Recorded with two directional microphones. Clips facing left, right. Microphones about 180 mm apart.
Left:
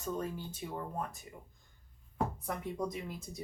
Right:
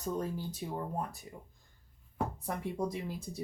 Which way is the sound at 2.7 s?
30° right (ahead or behind).